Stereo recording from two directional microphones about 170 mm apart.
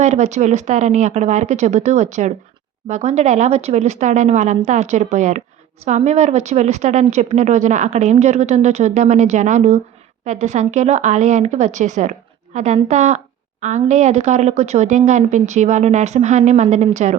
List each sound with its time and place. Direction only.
0.0 s a woman's voice: 40° right (ahead or behind)